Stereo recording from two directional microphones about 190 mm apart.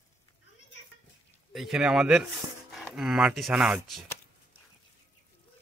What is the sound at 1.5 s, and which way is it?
Speech, centre (ahead or behind).